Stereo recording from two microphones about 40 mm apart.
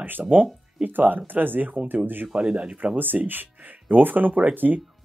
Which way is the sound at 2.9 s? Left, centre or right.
Right.